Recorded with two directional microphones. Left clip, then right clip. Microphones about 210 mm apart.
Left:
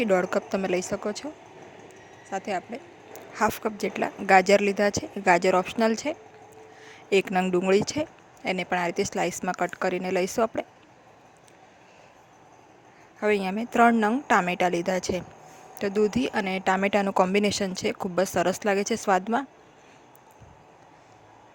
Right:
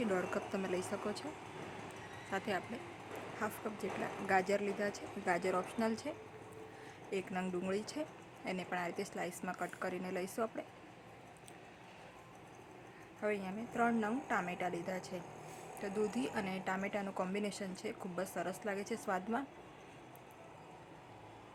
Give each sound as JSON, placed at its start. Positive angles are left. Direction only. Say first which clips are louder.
{"t": 0.0, "sound": "a woman's voice", "louder": "left 14 dB", "side_deg": 40}
{"t": 2.3, "sound": "a woman's voice", "louder": "left 9 dB", "side_deg": 30}
{"t": 3.3, "sound": "a woman's voice", "louder": "left 17 dB", "side_deg": 45}
{"t": 13.1, "sound": "speech", "louder": "left 14 dB", "side_deg": 45}